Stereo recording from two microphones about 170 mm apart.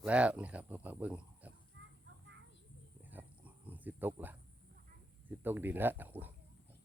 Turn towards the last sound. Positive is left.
turn(degrees=-10)  # may be behind; listen again after turning